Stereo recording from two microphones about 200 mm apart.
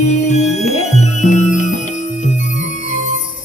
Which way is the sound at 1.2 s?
35° left (ahead or behind).